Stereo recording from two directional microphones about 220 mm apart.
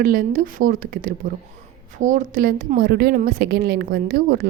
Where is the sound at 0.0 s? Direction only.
40° right (ahead or behind).